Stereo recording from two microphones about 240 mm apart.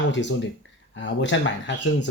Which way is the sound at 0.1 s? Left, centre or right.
Left.